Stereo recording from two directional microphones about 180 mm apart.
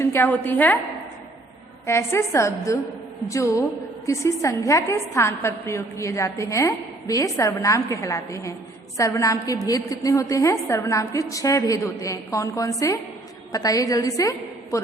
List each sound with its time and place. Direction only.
0.0 s a woman's voice: 15° left (ahead or behind)
1.9 s a woman's voice: 15° left (ahead or behind)